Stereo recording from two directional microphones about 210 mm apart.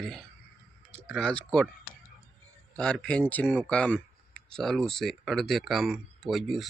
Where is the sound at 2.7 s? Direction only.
5° left (ahead or behind).